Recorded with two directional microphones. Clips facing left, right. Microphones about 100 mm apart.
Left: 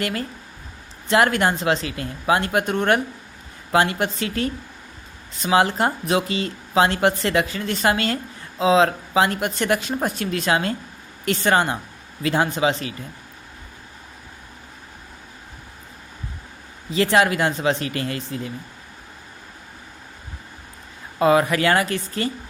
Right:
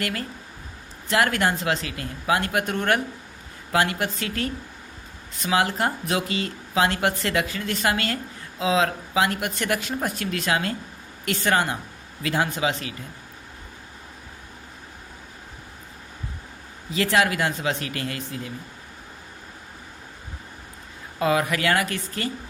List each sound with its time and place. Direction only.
0.0 s speech: 25° left (ahead or behind)
16.9 s speech: 30° left (ahead or behind)
21.2 s speech: 30° left (ahead or behind)